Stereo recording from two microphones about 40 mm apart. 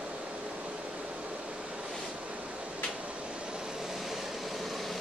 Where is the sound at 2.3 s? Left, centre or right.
Right.